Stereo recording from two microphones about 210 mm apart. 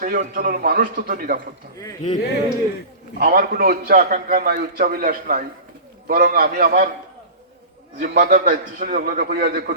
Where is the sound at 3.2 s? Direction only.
45° right (ahead or behind).